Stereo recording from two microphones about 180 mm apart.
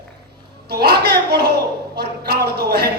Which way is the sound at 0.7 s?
65° right (ahead or behind).